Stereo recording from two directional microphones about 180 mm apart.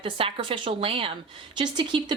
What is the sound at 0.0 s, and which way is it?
A woman's voice, 30° right (ahead or behind).